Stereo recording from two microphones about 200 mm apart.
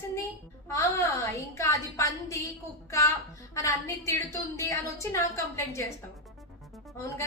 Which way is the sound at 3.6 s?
15° left (ahead or behind).